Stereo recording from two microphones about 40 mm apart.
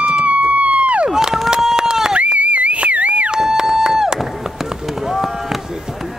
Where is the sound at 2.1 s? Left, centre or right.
Right.